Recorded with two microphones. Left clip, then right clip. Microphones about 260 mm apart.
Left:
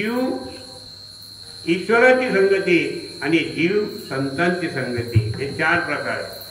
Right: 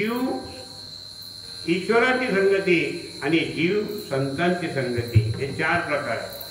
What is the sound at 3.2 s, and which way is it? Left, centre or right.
A man's voice, left.